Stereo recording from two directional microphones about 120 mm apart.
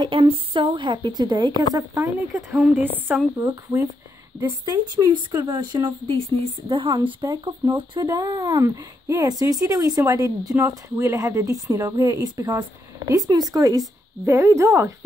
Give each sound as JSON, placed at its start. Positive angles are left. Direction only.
{"t": 0.0, "sound": "speech", "side_deg": -45}
{"t": 2.3, "sound": "speech", "side_deg": -15}
{"t": 4.4, "sound": "speech", "side_deg": -30}